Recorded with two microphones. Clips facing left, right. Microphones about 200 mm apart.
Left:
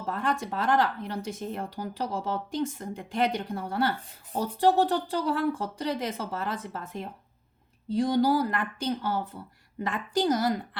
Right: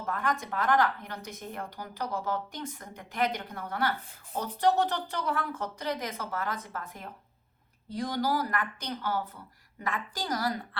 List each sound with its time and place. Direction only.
0.0 s speech: 30° left (ahead or behind)